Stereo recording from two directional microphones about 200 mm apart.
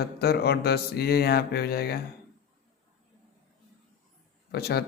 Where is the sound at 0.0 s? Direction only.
50° left (ahead or behind).